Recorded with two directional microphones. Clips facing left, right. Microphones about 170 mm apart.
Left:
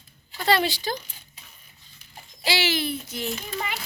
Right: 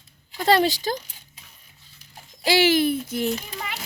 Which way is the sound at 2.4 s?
50° right (ahead or behind).